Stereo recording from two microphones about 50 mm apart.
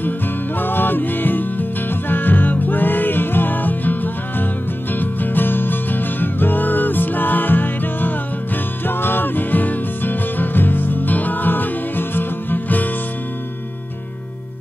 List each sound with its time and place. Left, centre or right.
0.6 s music: left